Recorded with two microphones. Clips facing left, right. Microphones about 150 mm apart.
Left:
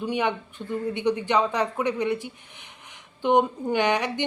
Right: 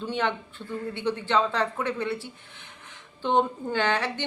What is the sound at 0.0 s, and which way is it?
Speech, 15° left (ahead or behind).